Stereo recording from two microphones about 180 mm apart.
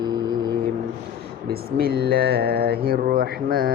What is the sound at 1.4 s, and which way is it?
Speech, 60° right (ahead or behind).